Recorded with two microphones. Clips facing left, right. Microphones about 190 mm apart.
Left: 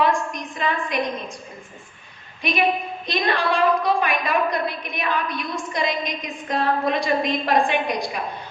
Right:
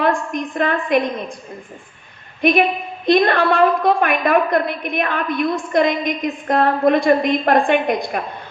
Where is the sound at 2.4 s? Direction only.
55° right (ahead or behind).